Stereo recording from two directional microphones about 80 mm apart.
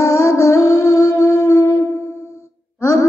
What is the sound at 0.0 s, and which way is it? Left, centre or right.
Music, left.